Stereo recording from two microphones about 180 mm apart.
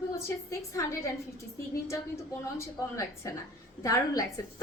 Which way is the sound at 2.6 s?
15° left (ahead or behind).